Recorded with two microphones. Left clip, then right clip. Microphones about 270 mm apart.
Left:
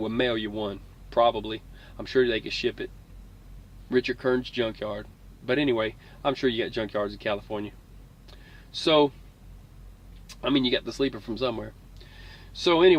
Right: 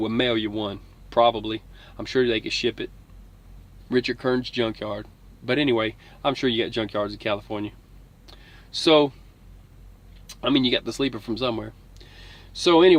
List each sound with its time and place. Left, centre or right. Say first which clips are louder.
0.0 s speech: right 3 dB; right
8.3 s a sound: right 5 dB; right
10.2 s a man's voice: right 3 dB; right